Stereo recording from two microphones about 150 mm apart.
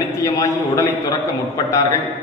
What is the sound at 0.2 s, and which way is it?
Speech, 20° left (ahead or behind).